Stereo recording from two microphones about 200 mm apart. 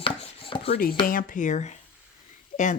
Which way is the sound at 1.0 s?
45° left (ahead or behind).